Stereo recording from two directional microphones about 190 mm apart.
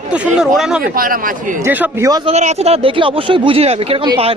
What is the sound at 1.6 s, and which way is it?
Speech, 10° right (ahead or behind).